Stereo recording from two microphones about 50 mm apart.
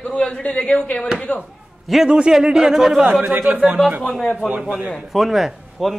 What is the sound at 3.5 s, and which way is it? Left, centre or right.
Speech, right.